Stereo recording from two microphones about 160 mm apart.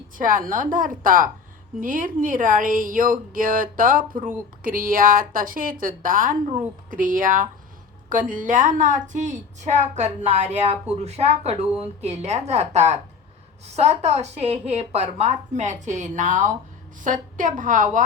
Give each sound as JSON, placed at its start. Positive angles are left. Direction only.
{"t": 0.2, "sound": "a woman's voice", "side_deg": -55}